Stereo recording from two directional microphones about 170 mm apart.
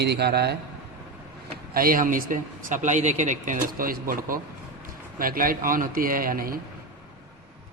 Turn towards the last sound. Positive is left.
turn(degrees=-60)  # may be behind; listen again after turning